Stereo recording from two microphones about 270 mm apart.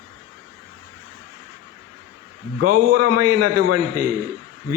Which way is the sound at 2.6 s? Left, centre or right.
Right.